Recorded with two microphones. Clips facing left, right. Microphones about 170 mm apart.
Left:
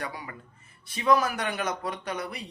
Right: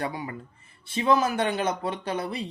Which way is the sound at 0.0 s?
25° right (ahead or behind).